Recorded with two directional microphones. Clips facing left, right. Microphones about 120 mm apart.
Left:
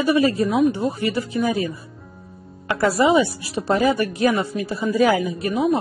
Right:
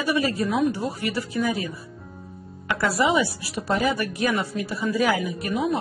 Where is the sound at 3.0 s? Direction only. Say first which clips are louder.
Left 5 dB; 25° left (ahead or behind).